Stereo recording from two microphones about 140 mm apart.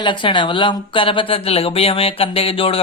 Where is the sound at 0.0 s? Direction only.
35° left (ahead or behind).